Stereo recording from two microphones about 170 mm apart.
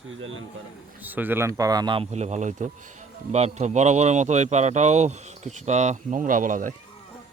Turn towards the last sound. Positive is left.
turn(degrees=-50)  # may be behind; listen again after turning